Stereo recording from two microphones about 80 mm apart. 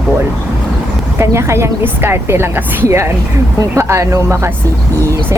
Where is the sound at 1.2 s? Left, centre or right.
Right.